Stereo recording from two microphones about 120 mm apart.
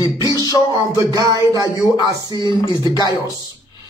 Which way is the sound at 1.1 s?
30° right (ahead or behind).